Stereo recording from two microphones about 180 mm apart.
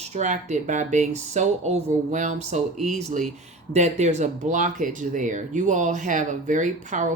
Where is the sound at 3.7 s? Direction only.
40° right (ahead or behind).